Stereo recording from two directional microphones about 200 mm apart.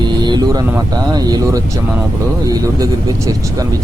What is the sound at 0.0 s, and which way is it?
Speech, 20° right (ahead or behind).